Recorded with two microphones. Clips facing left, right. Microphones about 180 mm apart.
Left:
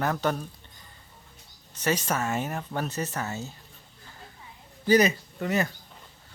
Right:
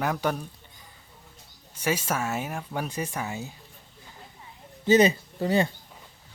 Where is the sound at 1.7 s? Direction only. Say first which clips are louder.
Even; 10° right (ahead or behind).